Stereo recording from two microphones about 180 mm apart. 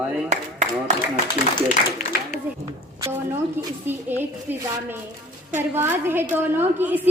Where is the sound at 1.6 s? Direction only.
40° left (ahead or behind).